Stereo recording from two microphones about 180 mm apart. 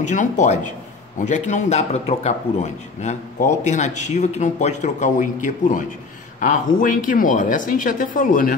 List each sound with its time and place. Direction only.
0.0 s a man's voice: 45° left (ahead or behind)